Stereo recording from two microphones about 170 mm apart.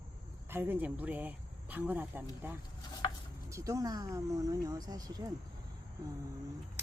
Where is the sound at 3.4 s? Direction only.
20° right (ahead or behind).